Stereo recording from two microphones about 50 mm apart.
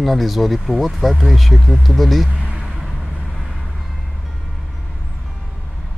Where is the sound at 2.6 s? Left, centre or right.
Centre.